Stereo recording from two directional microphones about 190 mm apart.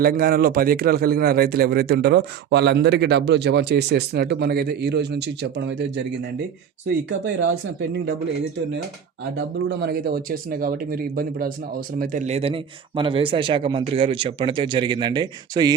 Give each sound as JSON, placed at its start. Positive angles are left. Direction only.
{"t": 0.0, "sound": "speech", "side_deg": -50}
{"t": 9.4, "sound": "speech", "side_deg": -60}